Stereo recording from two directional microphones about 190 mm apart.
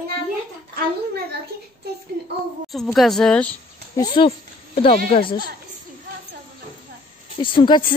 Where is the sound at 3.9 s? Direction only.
25° left (ahead or behind).